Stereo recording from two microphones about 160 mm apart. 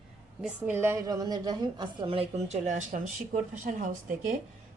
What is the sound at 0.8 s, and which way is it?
A woman's voice, 20° right (ahead or behind).